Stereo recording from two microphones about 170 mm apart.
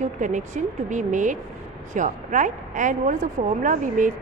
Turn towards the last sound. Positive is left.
turn(degrees=-50)  # may be behind; listen again after turning